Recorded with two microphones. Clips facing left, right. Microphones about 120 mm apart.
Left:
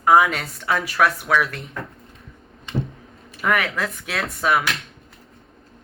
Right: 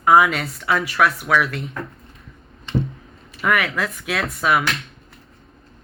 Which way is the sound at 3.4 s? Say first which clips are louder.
Right 1 dB; 35° left (ahead or behind).